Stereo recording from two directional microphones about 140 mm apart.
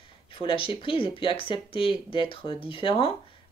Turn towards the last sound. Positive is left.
turn(degrees=40)  # may be behind; listen again after turning